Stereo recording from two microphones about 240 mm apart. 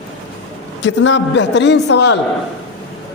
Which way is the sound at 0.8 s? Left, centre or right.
Left.